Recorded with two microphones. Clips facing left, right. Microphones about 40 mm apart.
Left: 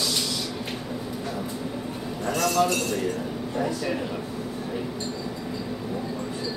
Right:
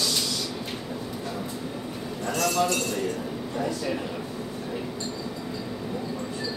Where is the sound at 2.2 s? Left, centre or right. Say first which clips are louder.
Left 2 dB; centre.